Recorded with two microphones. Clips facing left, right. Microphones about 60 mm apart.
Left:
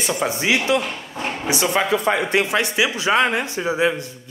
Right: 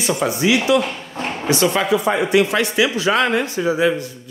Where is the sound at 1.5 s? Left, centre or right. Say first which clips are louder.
Right 3 dB; centre.